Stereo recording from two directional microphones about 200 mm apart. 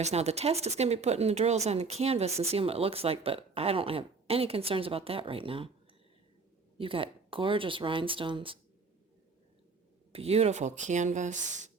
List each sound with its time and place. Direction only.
0.0 s speech: 30° right (ahead or behind)
6.7 s speech: 25° right (ahead or behind)
10.1 s speech: 30° right (ahead or behind)